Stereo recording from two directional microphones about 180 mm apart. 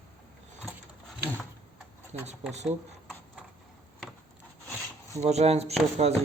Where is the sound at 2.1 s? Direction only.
35° right (ahead or behind).